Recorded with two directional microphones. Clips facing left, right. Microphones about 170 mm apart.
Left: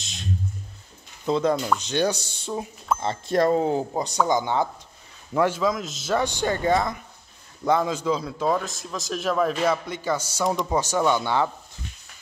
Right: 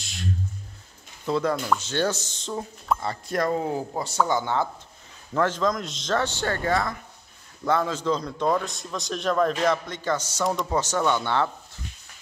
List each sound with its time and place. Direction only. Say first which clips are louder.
0.0 s a sound: right 3 dB; 20° left (ahead or behind)
1.2 s a man's voice: left 3 dB; 20° left (ahead or behind)
3.0 s speech: left 5 dB; 25° left (ahead or behind)
3.9 s a man's voice: left 2 dB; 15° left (ahead or behind)